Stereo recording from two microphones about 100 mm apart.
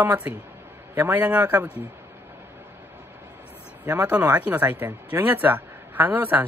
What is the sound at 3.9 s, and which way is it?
Speech, 20° right (ahead or behind).